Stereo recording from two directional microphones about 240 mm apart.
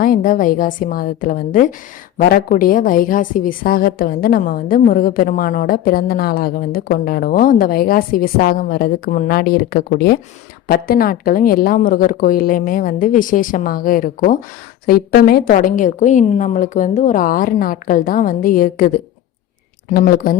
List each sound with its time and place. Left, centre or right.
0.0 s a woman's voice: left